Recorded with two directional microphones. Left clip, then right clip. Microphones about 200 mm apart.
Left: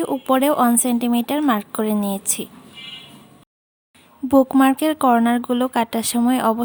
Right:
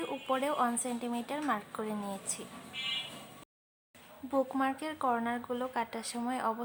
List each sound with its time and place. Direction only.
0.0 s speech: 50° left (ahead or behind)
4.3 s speech: 50° left (ahead or behind)